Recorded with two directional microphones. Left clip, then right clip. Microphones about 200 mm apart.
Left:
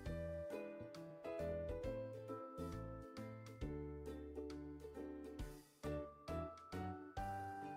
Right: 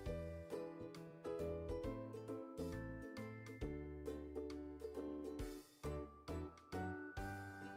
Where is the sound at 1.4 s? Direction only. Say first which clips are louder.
Left 3 dB; centre (ahead or behind).